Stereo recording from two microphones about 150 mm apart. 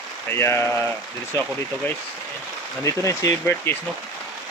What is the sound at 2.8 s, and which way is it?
Speech, 20° left (ahead or behind).